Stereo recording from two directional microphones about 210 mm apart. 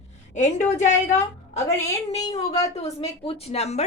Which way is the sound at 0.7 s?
35° left (ahead or behind).